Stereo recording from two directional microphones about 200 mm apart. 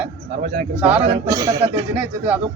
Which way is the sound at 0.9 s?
30° right (ahead or behind).